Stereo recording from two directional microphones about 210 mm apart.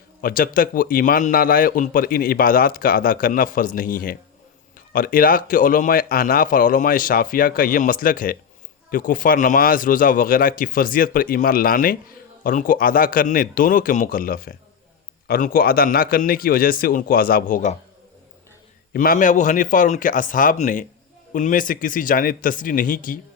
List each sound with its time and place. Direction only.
0.2 s a man's voice: 40° left (ahead or behind)
18.9 s speech: 40° left (ahead or behind)